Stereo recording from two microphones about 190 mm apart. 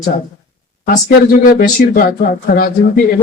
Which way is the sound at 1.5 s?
45° left (ahead or behind).